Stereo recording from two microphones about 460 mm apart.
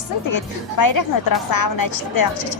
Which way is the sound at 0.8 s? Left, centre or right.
Left.